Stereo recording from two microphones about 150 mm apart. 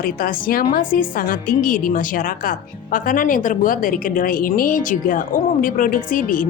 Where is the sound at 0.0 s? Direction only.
70° left (ahead or behind).